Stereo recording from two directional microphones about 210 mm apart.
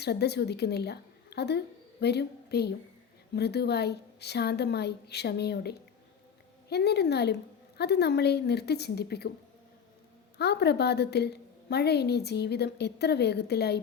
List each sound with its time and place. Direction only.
0.0 s a woman's voice: 50° left (ahead or behind)
10.3 s a woman's voice: 50° left (ahead or behind)